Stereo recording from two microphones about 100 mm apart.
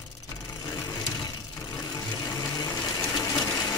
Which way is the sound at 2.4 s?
40° left (ahead or behind).